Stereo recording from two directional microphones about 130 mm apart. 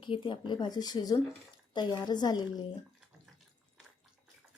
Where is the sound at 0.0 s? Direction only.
40° left (ahead or behind).